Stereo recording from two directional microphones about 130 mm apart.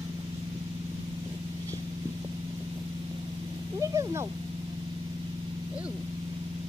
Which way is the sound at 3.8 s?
25° right (ahead or behind).